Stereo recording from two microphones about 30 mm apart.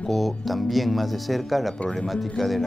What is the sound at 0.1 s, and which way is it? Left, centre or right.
Speech, centre.